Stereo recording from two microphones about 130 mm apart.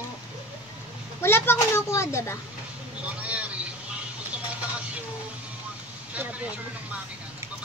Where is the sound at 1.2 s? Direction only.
15° left (ahead or behind).